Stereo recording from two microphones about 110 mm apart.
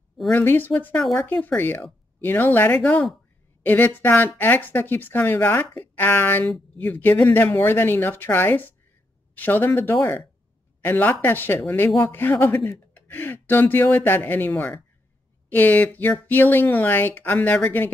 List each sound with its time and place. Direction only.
0.3 s speech: 20° left (ahead or behind)